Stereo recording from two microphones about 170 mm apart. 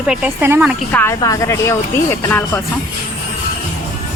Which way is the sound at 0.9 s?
15° left (ahead or behind).